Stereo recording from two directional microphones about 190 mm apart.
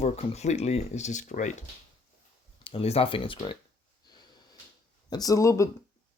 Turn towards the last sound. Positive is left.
turn(degrees=15)  # may be behind; listen again after turning